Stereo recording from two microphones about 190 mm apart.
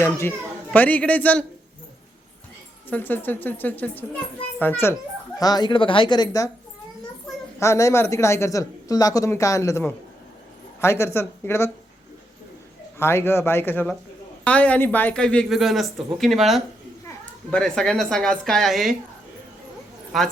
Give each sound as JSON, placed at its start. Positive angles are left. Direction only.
{"t": 0.0, "sound": "speech", "side_deg": 10}
{"t": 2.9, "sound": "speech", "side_deg": 10}
{"t": 7.6, "sound": "speech", "side_deg": 15}
{"t": 13.0, "sound": "speech", "side_deg": 15}
{"t": 20.1, "sound": "speech", "side_deg": 0}